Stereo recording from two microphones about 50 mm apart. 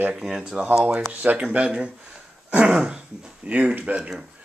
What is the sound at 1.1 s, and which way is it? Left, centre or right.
Speech, right.